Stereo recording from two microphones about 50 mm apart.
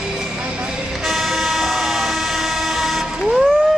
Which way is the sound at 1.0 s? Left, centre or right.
Centre.